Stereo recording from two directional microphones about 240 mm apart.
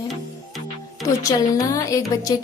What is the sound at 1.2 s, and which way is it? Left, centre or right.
Music, centre.